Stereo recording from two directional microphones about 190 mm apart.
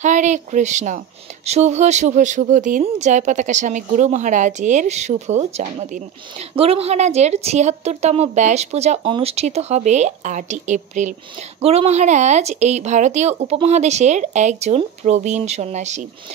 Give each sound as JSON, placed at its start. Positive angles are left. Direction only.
{"t": 0.0, "sound": "speech", "side_deg": -40}